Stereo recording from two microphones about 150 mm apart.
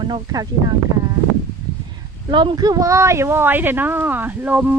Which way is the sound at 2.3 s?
30° right (ahead or behind).